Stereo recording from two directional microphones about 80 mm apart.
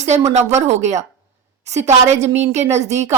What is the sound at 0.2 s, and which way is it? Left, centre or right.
Speech, right.